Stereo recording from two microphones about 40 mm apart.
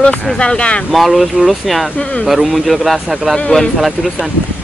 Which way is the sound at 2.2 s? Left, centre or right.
Centre.